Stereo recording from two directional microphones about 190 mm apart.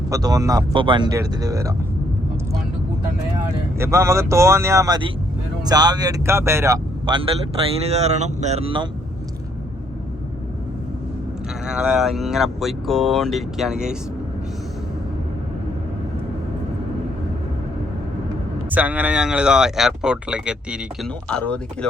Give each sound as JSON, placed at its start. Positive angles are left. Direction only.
{"t": 0.1, "sound": "speech", "side_deg": -20}
{"t": 3.8, "sound": "speech", "side_deg": -15}
{"t": 7.0, "sound": "a man's voice", "side_deg": -25}
{"t": 7.8, "sound": "speech", "side_deg": -35}
{"t": 11.6, "sound": "speech", "side_deg": -5}
{"t": 18.7, "sound": "speech", "side_deg": -10}
{"t": 21.2, "sound": "speech", "side_deg": 5}